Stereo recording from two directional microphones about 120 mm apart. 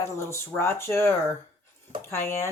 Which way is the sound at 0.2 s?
20° left (ahead or behind).